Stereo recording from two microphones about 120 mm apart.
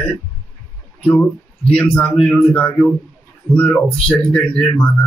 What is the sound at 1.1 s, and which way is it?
Speech, 10° left (ahead or behind).